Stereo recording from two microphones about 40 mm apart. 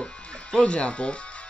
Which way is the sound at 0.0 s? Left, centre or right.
Left.